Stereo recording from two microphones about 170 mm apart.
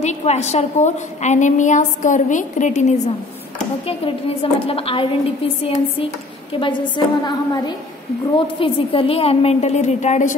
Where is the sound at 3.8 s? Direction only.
35° left (ahead or behind).